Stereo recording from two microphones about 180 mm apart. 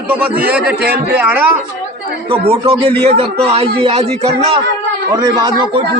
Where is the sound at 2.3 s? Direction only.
30° right (ahead or behind).